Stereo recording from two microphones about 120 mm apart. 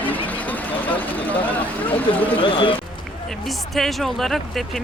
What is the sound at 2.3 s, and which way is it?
Speech, 45° left (ahead or behind).